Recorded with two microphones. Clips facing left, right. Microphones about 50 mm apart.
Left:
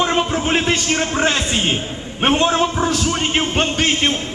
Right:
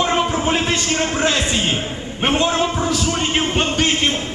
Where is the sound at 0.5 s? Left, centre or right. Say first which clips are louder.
Left 1 dB; left.